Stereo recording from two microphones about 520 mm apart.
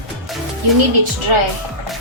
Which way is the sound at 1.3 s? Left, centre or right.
Right.